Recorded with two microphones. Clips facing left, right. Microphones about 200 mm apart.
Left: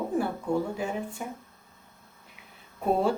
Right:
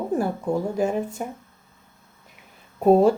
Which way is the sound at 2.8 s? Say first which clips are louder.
Right 9 dB; 40° right (ahead or behind).